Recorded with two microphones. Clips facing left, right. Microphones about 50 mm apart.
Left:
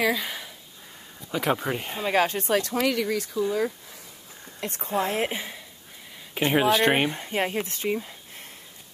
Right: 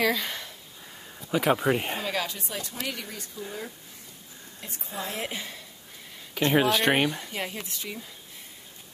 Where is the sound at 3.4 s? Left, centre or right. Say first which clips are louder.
Left 11 dB; left.